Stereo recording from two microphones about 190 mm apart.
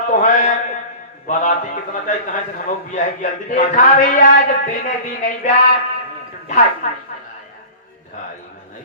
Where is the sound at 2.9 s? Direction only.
40° left (ahead or behind).